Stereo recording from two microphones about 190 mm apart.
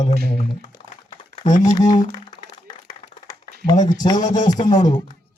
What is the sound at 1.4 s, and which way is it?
Speech, 20° left (ahead or behind).